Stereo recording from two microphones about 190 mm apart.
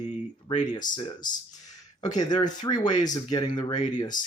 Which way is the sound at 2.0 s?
20° left (ahead or behind).